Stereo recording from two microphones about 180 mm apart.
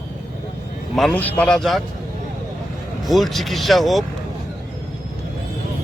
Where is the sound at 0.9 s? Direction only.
5° left (ahead or behind).